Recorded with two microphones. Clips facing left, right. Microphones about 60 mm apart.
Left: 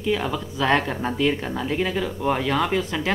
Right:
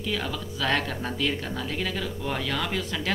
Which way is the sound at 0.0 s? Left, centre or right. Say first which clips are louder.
Left 6 dB; left.